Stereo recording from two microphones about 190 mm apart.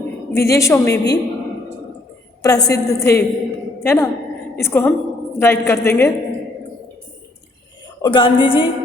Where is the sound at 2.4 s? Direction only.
20° left (ahead or behind).